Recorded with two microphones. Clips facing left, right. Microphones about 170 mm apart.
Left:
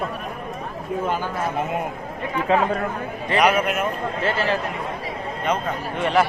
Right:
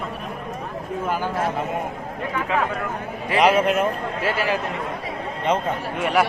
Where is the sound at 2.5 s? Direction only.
35° left (ahead or behind).